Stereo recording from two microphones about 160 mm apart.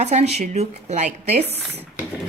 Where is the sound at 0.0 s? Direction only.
45° right (ahead or behind).